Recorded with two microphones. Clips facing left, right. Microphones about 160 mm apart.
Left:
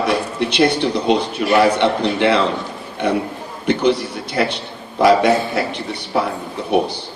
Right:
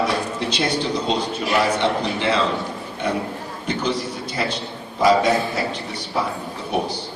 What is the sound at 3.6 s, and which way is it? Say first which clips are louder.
A man's voice: left 8 dB; 65° left (ahead or behind).